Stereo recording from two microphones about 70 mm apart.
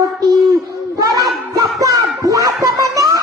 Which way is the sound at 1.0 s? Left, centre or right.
Right.